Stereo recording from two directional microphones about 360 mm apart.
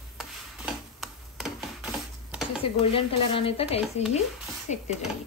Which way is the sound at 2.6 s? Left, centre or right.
Centre.